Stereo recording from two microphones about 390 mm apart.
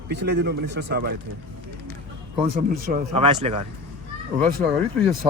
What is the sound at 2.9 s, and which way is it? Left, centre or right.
Speech, centre.